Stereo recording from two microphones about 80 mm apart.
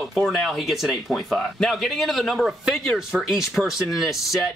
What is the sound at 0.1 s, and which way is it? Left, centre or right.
Speech, centre.